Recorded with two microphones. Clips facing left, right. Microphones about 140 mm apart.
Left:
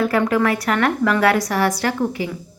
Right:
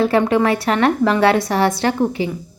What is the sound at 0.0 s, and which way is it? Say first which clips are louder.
A woman's voice: right 3 dB; 25° right (ahead or behind).